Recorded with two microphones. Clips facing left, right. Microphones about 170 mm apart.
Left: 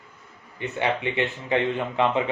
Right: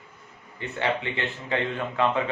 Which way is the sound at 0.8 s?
15° left (ahead or behind).